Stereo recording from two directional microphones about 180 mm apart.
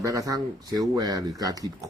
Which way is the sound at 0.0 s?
20° right (ahead or behind).